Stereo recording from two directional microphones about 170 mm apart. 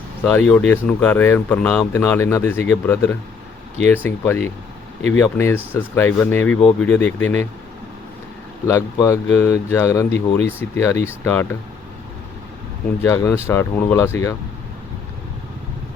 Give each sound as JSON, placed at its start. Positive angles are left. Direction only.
{"t": 0.3, "sound": "speech", "side_deg": 5}
{"t": 8.6, "sound": "speech", "side_deg": 15}
{"t": 13.0, "sound": "speech", "side_deg": 20}